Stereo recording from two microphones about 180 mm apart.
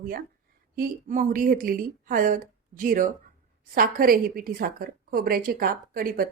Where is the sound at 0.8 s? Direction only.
45° right (ahead or behind).